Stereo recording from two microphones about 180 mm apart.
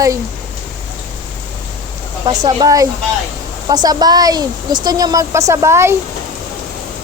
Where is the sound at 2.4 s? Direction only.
20° right (ahead or behind).